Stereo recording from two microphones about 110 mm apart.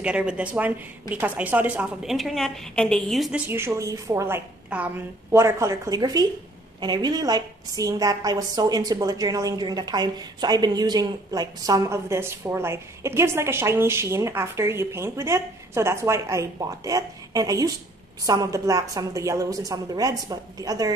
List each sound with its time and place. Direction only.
0.0 s speech: 10° right (ahead or behind)
2.0 s a woman's voice: centre (ahead or behind)
3.4 s a woman's voice: 25° right (ahead or behind)